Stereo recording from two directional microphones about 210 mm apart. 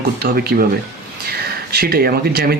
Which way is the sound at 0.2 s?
45° right (ahead or behind).